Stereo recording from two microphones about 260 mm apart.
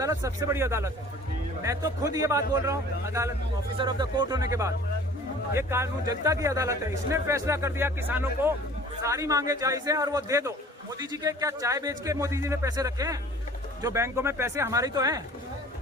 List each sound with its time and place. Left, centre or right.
0.0 s a man's voice: centre